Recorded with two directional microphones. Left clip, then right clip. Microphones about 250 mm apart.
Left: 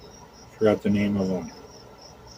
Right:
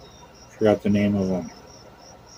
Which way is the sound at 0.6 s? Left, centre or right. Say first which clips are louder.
Right 2 dB; right.